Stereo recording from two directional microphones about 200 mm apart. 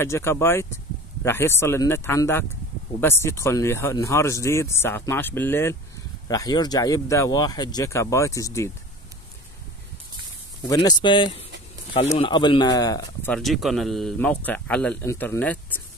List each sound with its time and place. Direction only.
0.0 s speech: 10° left (ahead or behind)
10.7 s speech: 20° left (ahead or behind)
13.3 s speech: centre (ahead or behind)